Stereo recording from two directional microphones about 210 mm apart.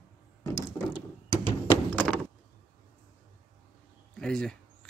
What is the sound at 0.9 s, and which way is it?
Thunk, 15° left (ahead or behind).